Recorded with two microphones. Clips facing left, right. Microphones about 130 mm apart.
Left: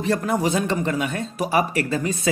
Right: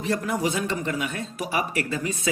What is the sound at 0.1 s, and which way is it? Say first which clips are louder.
Speech: left 4 dB; 40° left (ahead or behind).